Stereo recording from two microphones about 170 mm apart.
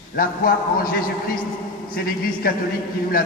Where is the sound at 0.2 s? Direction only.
55° left (ahead or behind).